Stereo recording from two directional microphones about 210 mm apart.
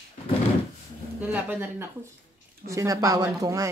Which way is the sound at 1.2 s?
5° right (ahead or behind).